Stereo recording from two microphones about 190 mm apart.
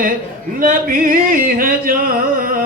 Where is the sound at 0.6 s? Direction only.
45° right (ahead or behind).